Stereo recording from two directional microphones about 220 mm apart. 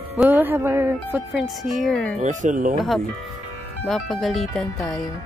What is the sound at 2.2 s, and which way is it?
Speech, 35° right (ahead or behind).